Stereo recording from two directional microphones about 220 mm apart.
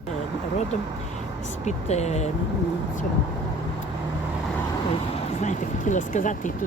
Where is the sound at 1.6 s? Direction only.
30° left (ahead or behind).